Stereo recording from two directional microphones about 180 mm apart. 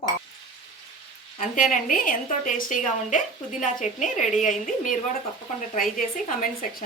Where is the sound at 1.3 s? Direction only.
45° left (ahead or behind).